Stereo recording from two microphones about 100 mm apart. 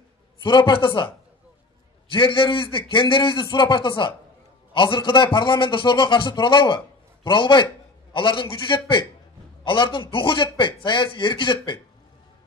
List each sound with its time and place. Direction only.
0.4 s a man's voice: 55° left (ahead or behind)
2.1 s a man's voice: 60° left (ahead or behind)